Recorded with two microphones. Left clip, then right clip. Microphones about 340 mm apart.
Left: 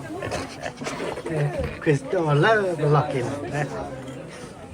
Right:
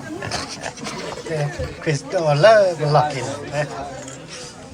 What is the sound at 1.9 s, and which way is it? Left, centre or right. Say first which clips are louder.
A man's voice: right 3 dB; centre.